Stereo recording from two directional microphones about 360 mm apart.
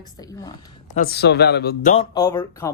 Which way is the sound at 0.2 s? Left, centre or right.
Centre.